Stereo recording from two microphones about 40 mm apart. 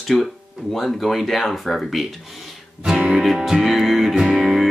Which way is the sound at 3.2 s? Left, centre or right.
Centre.